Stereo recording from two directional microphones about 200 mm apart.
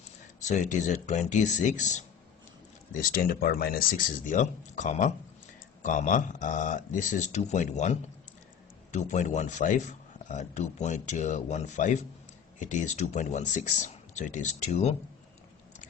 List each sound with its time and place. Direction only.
0.4 s a man's voice: 35° left (ahead or behind)